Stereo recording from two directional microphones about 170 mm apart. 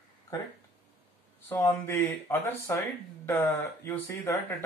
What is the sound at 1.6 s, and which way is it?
Speech, 15° left (ahead or behind).